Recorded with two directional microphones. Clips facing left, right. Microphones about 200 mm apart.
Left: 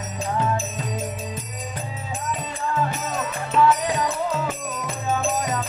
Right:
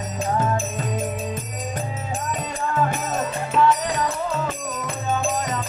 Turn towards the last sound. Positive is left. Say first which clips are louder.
# even
turn(degrees=5)  # may be behind; listen again after turning